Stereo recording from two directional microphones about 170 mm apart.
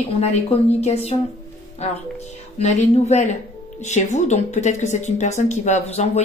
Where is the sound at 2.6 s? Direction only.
40° left (ahead or behind).